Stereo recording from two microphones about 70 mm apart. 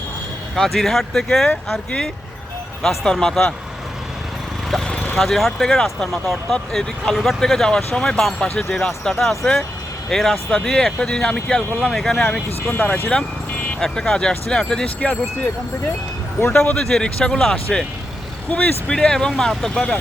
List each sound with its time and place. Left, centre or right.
0.5 s speech: centre
2.8 s speech: centre
4.7 s a sound: centre
5.1 s speech: centre
12.7 s speech: left
13.7 s speech: centre
16.5 s speech: centre